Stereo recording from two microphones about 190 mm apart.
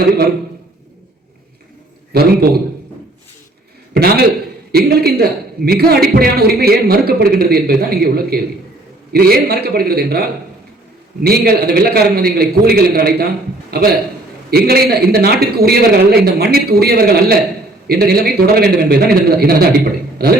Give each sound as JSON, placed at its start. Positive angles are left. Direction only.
{"t": 2.1, "sound": "a man's voice", "side_deg": -55}
{"t": 3.9, "sound": "a man's voice", "side_deg": -55}